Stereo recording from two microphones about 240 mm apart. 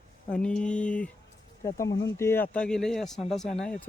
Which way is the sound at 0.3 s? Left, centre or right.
Centre.